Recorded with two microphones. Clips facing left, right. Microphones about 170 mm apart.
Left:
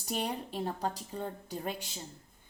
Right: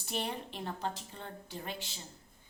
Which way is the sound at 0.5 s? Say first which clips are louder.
Left 4 dB; 35° left (ahead or behind).